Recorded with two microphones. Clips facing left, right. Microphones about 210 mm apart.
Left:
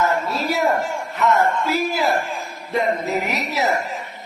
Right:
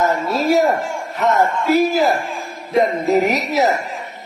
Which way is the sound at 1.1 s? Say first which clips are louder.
Right 2 dB; 40° right (ahead or behind).